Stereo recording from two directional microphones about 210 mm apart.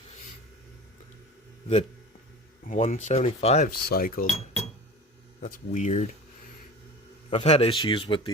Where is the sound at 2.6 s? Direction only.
30° left (ahead or behind).